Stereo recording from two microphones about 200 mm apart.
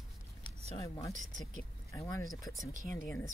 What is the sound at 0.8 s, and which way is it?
Speech, 15° left (ahead or behind).